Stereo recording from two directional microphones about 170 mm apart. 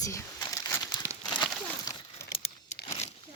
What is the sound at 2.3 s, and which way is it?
Crumpling, 40° left (ahead or behind).